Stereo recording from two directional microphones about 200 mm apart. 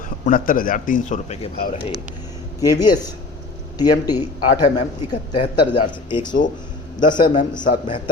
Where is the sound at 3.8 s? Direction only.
20° left (ahead or behind).